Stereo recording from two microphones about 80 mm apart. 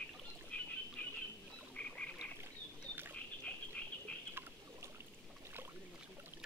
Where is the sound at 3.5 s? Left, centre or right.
Centre.